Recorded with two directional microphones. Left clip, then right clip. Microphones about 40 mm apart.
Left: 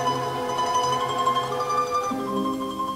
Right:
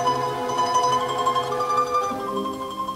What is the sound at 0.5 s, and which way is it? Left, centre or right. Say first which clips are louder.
Music: right 3 dB; right.